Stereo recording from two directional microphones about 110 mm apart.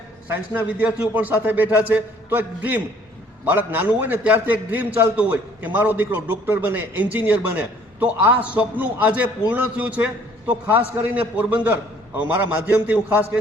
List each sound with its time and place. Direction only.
0.3 s a man's voice: 15° right (ahead or behind)